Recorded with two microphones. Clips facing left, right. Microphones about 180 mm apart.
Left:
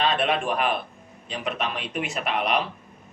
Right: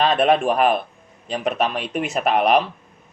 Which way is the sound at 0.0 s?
45° right (ahead or behind).